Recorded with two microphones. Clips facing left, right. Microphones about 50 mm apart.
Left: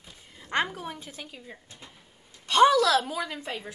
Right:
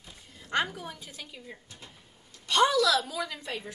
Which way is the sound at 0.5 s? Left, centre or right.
Left.